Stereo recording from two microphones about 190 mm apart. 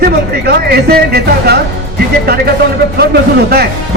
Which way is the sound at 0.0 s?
55° right (ahead or behind).